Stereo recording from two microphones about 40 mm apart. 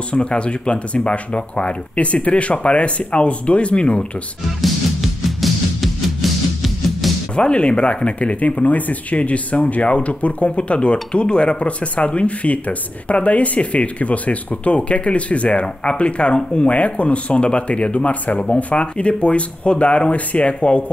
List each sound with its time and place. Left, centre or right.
0.1 s speech: left
4.6 s music: centre
7.3 s speech: left